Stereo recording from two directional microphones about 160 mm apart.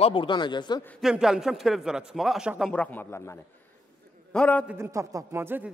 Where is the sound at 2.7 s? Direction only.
10° left (ahead or behind).